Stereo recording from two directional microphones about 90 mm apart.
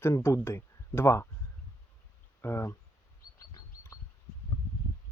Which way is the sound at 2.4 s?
30° left (ahead or behind).